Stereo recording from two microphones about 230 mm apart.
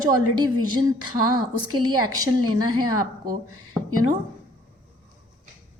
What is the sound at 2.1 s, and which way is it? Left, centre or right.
Speech, centre.